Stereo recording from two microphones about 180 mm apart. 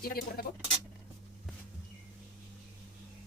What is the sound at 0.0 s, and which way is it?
Speech, 55° left (ahead or behind).